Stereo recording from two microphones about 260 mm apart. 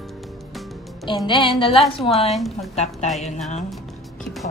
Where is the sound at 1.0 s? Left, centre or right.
Centre.